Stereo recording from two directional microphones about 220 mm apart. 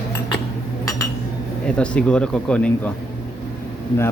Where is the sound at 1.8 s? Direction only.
5° left (ahead or behind).